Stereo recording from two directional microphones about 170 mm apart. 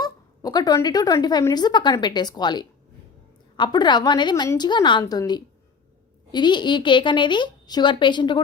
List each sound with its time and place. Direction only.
0.0 s a woman's voice: 25° left (ahead or behind)